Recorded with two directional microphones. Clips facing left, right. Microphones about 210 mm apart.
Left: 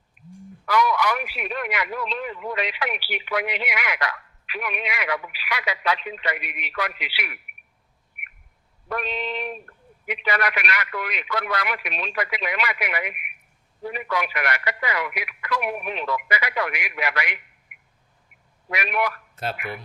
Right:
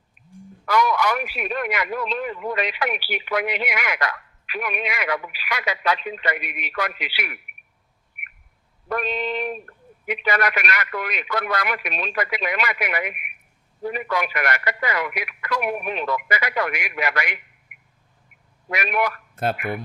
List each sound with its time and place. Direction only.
0.6 s a man's voice: 45° right (ahead or behind)
8.9 s a man's voice: 45° right (ahead or behind)
18.7 s a man's voice: 45° right (ahead or behind)